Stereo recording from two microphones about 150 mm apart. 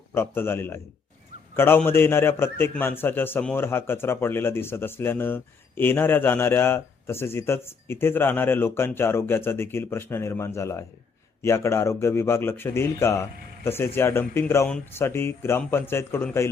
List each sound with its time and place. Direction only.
0.1 s a man's voice: 15° left (ahead or behind)